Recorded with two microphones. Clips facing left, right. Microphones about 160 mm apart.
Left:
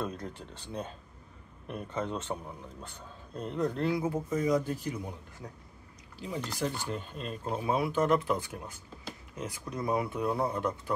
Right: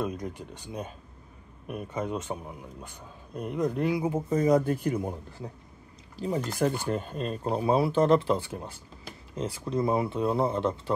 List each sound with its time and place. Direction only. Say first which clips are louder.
0.0 s speech: right 4 dB; 10° right (ahead or behind)
4.5 s speech: right 8 dB; 55° right (ahead or behind)
6.1 s speech: right 7 dB; 45° right (ahead or behind); by 10.8 s 25° right (ahead or behind)